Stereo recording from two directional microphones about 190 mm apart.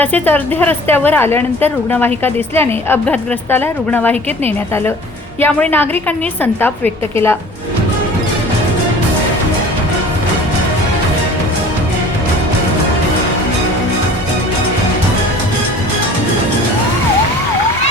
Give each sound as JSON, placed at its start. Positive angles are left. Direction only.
{"t": 0.0, "sound": "a woman's voice", "side_deg": 10}